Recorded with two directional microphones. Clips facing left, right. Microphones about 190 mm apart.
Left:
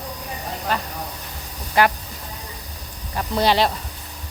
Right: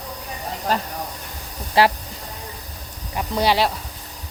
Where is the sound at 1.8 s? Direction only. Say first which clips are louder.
Right 1 dB; 30° right (ahead or behind).